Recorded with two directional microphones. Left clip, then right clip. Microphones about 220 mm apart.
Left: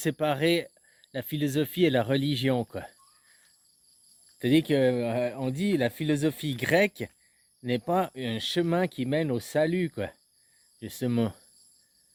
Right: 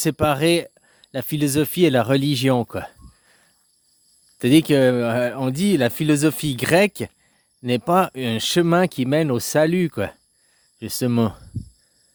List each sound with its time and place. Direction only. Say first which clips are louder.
0.0 s speech: right 7 dB; 30° right (ahead or behind)